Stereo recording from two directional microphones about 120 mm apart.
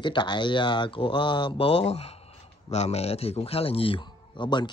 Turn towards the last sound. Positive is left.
turn(degrees=40)  # may be behind; listen again after turning